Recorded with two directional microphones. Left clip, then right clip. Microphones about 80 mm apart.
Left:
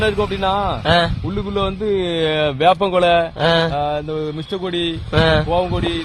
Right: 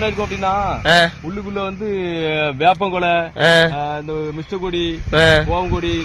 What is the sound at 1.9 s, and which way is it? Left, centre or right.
A man's voice, left.